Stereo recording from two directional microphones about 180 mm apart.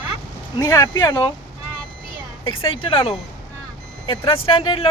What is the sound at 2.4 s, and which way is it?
Speech, 30° left (ahead or behind).